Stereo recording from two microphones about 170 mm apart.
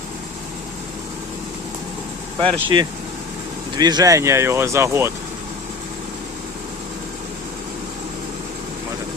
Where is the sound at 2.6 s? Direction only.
25° right (ahead or behind).